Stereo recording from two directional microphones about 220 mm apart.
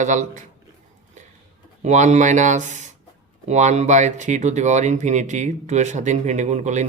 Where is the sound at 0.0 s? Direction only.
35° right (ahead or behind).